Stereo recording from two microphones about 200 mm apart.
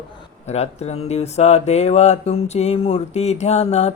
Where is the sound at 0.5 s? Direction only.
35° left (ahead or behind).